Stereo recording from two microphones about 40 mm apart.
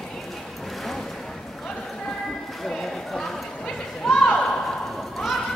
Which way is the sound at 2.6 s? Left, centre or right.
Centre.